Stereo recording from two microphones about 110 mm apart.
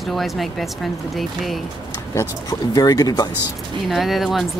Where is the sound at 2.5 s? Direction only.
35° left (ahead or behind).